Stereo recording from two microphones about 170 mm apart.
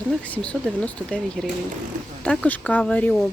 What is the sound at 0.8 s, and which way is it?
Speech, 5° left (ahead or behind).